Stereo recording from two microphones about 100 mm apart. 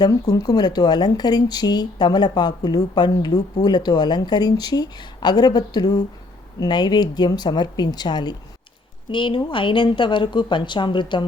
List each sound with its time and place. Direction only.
0.0 s speech: 40° left (ahead or behind)